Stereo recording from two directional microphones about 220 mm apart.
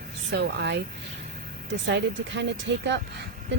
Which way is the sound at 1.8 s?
55° right (ahead or behind).